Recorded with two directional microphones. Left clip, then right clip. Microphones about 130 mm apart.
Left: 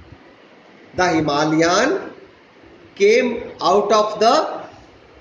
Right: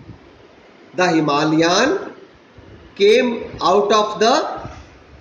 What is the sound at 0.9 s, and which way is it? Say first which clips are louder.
Speech: right 1 dB; 30° right (ahead or behind).